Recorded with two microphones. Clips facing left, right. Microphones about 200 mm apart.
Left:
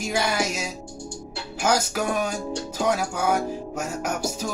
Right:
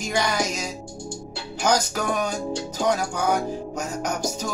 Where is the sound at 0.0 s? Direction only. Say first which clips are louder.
Even; 5° left (ahead or behind).